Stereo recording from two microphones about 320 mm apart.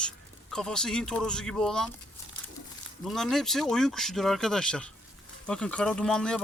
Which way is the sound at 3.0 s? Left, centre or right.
Centre.